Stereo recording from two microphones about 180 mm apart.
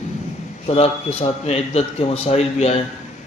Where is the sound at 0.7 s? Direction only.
35° left (ahead or behind).